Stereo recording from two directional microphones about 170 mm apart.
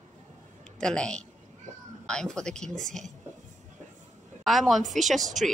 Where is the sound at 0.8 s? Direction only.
5° left (ahead or behind).